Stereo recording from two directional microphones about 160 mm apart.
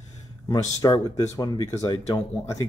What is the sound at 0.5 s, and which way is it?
Speech, 25° left (ahead or behind).